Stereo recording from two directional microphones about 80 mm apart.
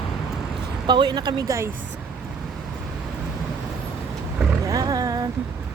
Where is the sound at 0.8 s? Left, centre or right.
Right.